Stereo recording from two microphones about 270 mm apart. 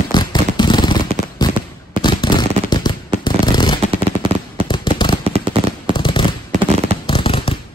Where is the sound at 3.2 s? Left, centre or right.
Centre.